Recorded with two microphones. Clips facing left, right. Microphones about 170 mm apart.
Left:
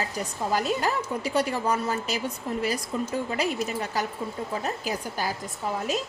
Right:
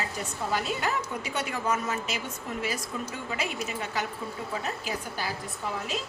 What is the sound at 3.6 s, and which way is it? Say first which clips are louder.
Speech: left 3 dB; 40° left (ahead or behind).